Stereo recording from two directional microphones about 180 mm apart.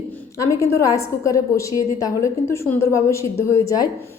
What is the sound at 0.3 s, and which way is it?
A woman's voice, 15° left (ahead or behind).